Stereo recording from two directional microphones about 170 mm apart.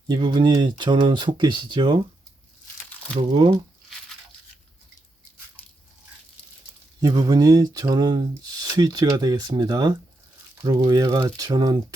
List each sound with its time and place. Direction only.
0.1 s speech: 25° right (ahead or behind)
3.2 s speech: 30° right (ahead or behind)
7.0 s speech: 25° right (ahead or behind)